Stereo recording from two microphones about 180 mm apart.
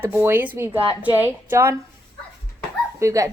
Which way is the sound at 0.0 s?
10° right (ahead or behind).